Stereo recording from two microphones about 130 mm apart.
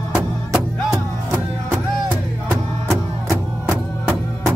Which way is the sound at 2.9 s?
20° right (ahead or behind).